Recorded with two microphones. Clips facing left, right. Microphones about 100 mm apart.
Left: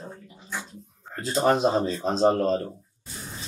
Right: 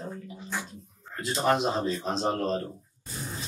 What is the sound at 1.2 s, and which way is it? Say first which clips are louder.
Speech: left 4 dB; 40° left (ahead or behind).